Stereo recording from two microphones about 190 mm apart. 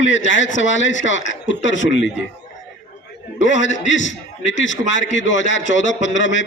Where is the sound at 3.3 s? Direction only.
80° left.